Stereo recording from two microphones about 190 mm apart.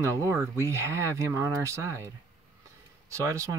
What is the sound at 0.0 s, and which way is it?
Speech, 15° right (ahead or behind).